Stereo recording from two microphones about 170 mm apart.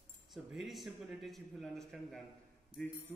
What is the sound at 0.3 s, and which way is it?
Speech, centre (ahead or behind).